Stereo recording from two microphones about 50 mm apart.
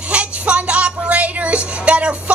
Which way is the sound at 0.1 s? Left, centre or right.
Right.